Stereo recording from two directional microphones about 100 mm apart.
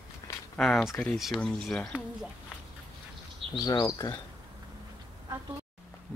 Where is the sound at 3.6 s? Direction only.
40° left (ahead or behind).